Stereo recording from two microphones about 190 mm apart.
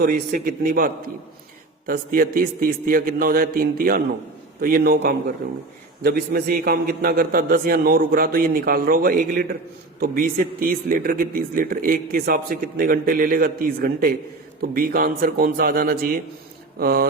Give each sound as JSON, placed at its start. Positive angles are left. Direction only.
{"t": 0.0, "sound": "speech", "side_deg": -50}
{"t": 1.9, "sound": "speech", "side_deg": -50}